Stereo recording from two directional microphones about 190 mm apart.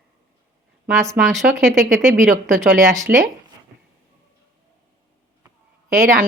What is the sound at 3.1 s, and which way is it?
Speech, 50° right (ahead or behind).